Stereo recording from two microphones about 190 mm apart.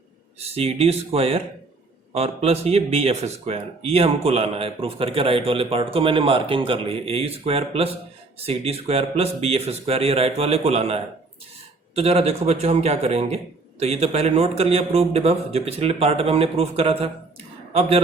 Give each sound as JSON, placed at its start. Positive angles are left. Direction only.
{"t": 0.3, "sound": "a man's voice", "side_deg": -30}